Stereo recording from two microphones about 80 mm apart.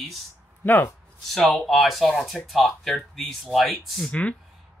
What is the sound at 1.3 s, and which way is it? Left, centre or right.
Speech, centre.